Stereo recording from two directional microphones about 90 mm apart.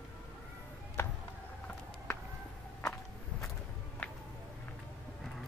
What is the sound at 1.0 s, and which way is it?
Music, 25° left (ahead or behind).